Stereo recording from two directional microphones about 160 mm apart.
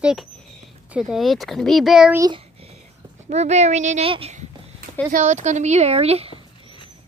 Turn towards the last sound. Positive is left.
turn(degrees=-40)  # may be behind; listen again after turning